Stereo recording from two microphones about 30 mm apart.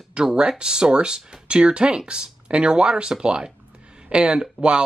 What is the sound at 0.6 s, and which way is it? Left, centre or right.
Speech, right.